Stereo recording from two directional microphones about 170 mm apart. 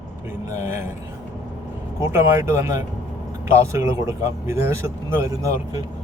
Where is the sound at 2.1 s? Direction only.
15° right (ahead or behind).